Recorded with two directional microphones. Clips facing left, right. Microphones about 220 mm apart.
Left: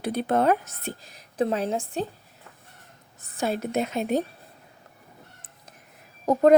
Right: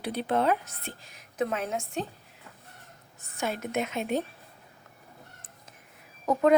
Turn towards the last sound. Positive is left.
turn(degrees=35)  # may be behind; listen again after turning